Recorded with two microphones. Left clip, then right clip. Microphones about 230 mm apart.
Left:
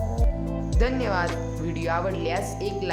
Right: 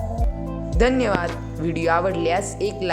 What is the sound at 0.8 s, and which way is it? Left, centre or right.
Speech, right.